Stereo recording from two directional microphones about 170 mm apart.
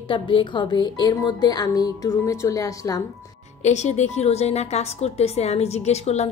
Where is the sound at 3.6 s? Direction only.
40° left (ahead or behind).